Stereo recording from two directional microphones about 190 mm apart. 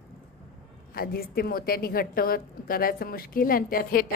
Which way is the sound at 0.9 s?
50° left (ahead or behind).